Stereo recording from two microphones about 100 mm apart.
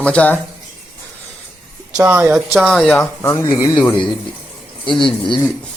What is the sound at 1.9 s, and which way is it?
Mantra, 15° right (ahead or behind).